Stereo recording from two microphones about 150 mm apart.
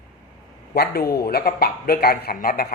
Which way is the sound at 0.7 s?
90° left.